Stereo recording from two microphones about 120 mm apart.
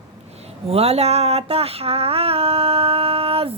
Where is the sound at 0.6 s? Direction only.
60° right (ahead or behind).